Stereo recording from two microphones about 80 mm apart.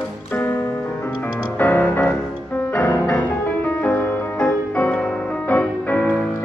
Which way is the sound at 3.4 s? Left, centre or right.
Left.